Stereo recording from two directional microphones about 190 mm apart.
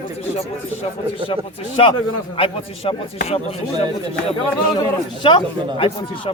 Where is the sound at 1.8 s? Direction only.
30° left (ahead or behind).